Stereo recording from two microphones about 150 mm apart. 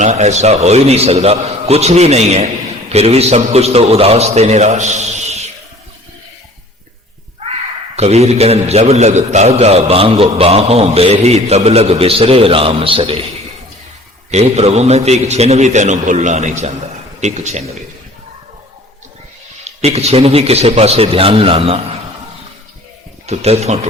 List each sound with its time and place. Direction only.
0.0 s a man's voice: 50° right (ahead or behind)
7.9 s a man's voice: 45° right (ahead or behind)
14.3 s a man's voice: 45° right (ahead or behind)
19.6 s a man's voice: 45° right (ahead or behind)
23.2 s a man's voice: 45° right (ahead or behind)